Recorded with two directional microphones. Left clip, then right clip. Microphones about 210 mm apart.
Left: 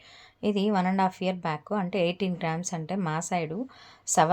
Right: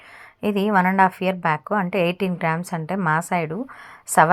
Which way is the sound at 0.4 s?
15° right (ahead or behind).